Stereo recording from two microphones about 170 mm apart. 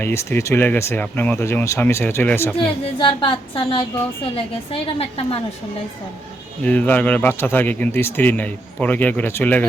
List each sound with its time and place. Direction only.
0.0 s speech: 15° left (ahead or behind)
2.6 s a woman's voice: 30° left (ahead or behind)
6.7 s speech: 10° left (ahead or behind)